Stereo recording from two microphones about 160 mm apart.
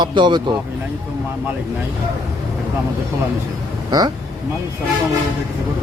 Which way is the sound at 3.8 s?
25° right (ahead or behind).